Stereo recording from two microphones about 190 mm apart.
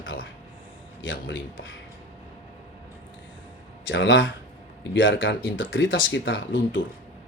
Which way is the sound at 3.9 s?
70° left (ahead or behind).